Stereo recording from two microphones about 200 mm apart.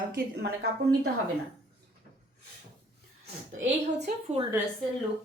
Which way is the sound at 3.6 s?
55° right (ahead or behind).